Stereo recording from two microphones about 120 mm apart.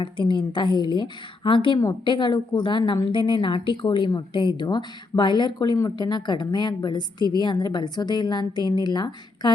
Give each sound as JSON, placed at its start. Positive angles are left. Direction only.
{"t": 0.0, "sound": "speech", "side_deg": 40}